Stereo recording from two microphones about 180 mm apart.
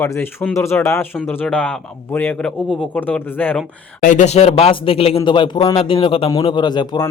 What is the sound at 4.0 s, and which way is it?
A man's voice, 45° left (ahead or behind).